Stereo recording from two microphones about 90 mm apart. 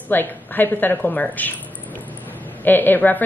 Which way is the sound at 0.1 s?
20° left (ahead or behind).